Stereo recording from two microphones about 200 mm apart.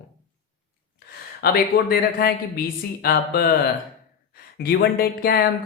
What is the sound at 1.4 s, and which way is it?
Speech, 50° left (ahead or behind).